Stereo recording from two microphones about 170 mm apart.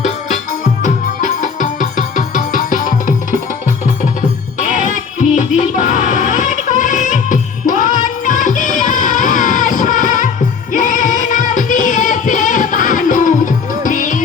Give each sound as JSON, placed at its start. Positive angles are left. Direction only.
{"t": 0.8, "sound": "music", "side_deg": 45}
{"t": 4.6, "sound": "music", "side_deg": 50}